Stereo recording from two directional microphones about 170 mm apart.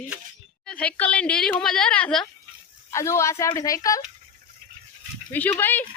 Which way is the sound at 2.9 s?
15° left (ahead or behind).